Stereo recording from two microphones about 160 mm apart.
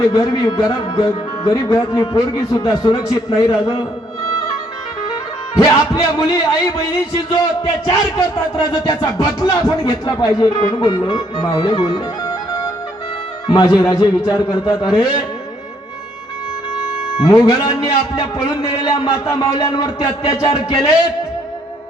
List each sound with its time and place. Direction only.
0.0 s speech: 20° left (ahead or behind)
5.5 s speech: 20° left (ahead or behind)
7.9 s speech: 20° left (ahead or behind)
10.6 s music: 25° left (ahead or behind)
13.5 s speech: 25° left (ahead or behind)
17.2 s speech: 20° left (ahead or behind)